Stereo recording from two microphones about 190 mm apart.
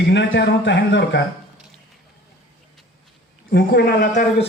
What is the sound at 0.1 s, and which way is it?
A man's voice, 70° left (ahead or behind).